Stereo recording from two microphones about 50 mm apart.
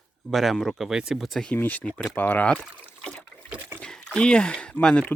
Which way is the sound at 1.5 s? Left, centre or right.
Left.